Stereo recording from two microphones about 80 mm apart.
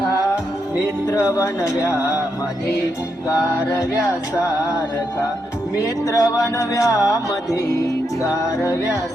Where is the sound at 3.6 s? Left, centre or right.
Left.